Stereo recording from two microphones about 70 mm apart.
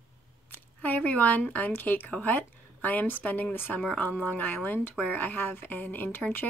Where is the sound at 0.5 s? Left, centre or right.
Left.